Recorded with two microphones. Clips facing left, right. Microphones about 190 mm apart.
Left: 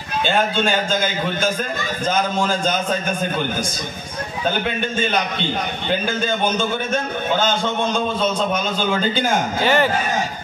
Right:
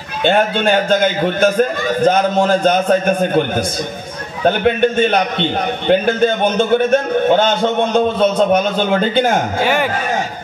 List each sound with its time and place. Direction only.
0.2 s a man's voice: 60° right (ahead or behind)
9.6 s speech: 10° right (ahead or behind)